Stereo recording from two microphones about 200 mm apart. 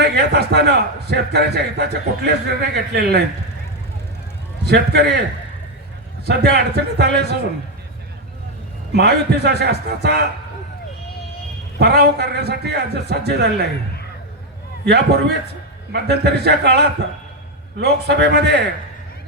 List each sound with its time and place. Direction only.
0.0 s a man's voice: 55° right (ahead or behind)
4.6 s a man's voice: 55° right (ahead or behind)
6.2 s a man's voice: 55° right (ahead or behind)
8.9 s a man's voice: 55° right (ahead or behind)
11.8 s a man's voice: 55° right (ahead or behind)
14.8 s a man's voice: 55° right (ahead or behind)